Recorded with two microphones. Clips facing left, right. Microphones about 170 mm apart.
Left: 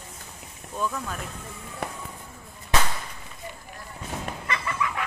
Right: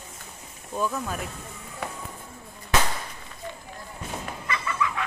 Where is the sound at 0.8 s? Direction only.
10° right (ahead or behind).